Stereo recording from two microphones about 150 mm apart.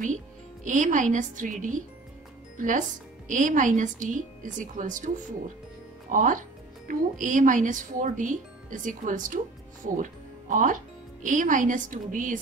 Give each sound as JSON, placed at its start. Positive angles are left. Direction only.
{"t": 0.7, "sound": "speech", "side_deg": -55}